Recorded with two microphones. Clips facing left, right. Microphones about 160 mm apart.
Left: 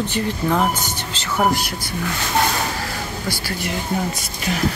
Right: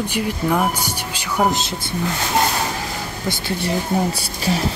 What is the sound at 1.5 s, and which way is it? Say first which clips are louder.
Speech: even; 25° right (ahead or behind).